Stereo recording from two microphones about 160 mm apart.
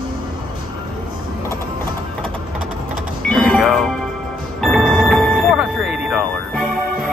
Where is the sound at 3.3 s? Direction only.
Centre (ahead or behind).